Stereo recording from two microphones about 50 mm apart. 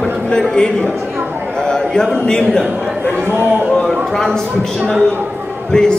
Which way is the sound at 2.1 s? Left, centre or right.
Centre.